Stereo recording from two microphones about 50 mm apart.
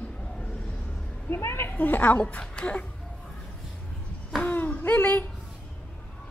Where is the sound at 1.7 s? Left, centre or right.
Left.